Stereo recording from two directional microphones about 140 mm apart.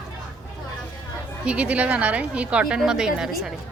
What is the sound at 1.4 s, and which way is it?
A woman's voice, 10° right (ahead or behind).